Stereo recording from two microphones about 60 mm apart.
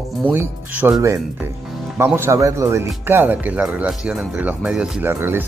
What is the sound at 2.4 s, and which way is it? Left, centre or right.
Speech, right.